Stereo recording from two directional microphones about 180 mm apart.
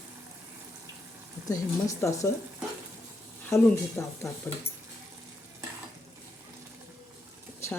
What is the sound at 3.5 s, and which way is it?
Speech, 15° left (ahead or behind).